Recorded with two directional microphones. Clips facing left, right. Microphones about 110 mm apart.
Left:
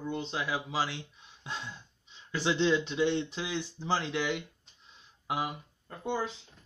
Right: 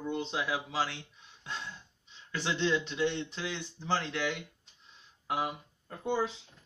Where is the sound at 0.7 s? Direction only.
10° left (ahead or behind).